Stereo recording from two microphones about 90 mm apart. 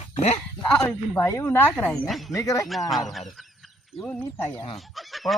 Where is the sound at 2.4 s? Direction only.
40° left (ahead or behind).